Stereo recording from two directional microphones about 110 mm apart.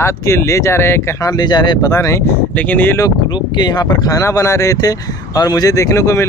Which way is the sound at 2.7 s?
15° left (ahead or behind).